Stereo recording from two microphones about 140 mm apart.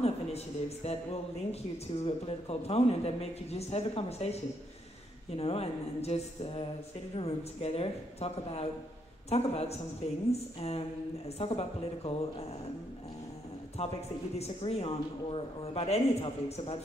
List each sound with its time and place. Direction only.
0.0 s a man's voice: 50° left (ahead or behind)
14.4 s a man's voice: 45° left (ahead or behind)